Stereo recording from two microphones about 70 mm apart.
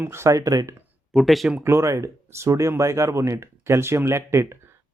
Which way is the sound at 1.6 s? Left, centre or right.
Right.